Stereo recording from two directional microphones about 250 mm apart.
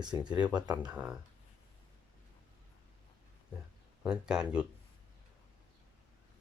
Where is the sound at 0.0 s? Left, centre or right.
Centre.